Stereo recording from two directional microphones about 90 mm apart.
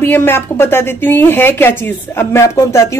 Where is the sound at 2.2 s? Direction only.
35° left (ahead or behind).